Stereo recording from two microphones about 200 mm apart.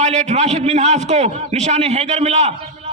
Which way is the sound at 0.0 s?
35° right (ahead or behind).